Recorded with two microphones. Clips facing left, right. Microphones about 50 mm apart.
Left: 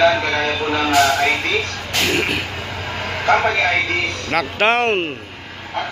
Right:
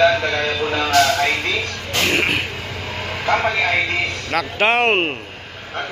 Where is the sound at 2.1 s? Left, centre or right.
Right.